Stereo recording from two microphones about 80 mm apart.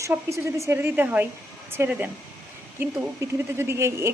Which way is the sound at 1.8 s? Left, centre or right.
Right.